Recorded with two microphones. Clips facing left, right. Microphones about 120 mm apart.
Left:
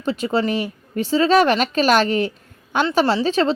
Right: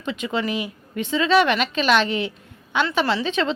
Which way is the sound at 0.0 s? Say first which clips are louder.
Left 5 dB; 35° left (ahead or behind).